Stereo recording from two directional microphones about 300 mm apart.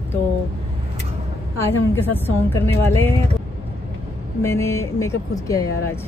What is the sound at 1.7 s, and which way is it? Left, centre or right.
Speech, centre.